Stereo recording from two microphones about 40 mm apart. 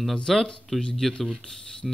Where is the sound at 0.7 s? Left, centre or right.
Centre.